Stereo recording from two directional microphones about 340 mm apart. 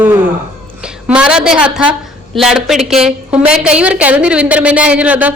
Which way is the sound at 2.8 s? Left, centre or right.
Centre.